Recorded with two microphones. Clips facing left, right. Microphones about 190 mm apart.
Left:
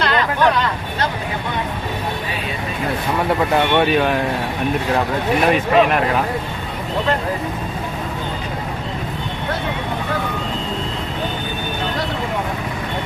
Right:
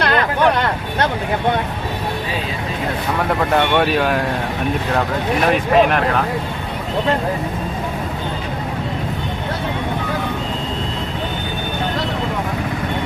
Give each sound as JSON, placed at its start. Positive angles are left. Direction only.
{"t": 0.0, "sound": "speech", "side_deg": -60}
{"t": 3.8, "sound": "speech", "side_deg": 0}
{"t": 5.5, "sound": "speech", "side_deg": 0}